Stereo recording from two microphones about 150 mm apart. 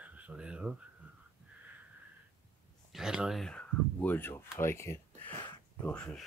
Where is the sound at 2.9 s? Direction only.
5° right (ahead or behind).